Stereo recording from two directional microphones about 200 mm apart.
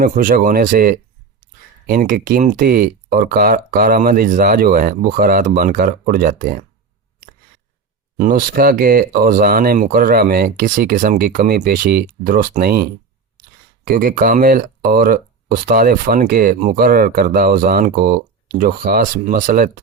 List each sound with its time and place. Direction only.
0.0 s speech: 45° right (ahead or behind)
8.2 s speech: 45° right (ahead or behind)